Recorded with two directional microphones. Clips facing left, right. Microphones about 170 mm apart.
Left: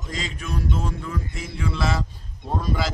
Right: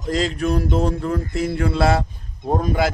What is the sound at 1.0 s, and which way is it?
Speech, 60° right (ahead or behind).